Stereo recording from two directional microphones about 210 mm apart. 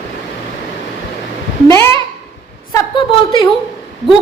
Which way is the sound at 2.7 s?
20° left (ahead or behind).